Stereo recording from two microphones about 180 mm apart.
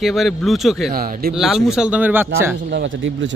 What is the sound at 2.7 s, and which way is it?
Speech, 90° right.